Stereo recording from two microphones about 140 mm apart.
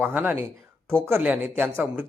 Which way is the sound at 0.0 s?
15° right (ahead or behind).